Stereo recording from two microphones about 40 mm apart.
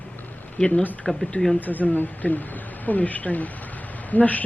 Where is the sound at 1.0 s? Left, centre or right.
Centre.